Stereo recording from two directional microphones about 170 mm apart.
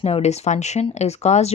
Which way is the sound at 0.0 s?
40° left (ahead or behind).